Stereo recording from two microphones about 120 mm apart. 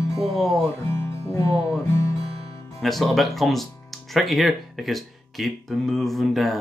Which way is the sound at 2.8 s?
Centre (ahead or behind).